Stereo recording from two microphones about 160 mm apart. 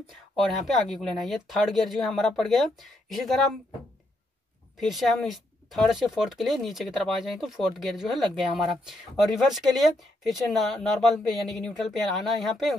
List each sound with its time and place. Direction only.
0.7 s speech: centre (ahead or behind)
4.7 s speech: centre (ahead or behind)